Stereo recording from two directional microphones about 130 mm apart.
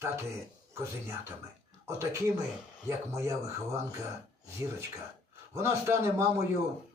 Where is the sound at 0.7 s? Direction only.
20° right (ahead or behind).